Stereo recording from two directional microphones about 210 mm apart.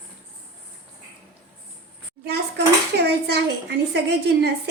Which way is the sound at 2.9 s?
50° right (ahead or behind).